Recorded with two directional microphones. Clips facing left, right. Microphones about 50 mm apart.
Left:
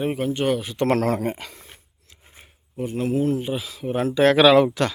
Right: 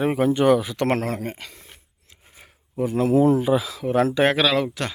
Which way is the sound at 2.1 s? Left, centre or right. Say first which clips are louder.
Even; right.